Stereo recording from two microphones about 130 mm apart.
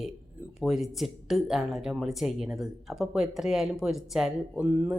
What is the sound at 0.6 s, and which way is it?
Speech, centre (ahead or behind).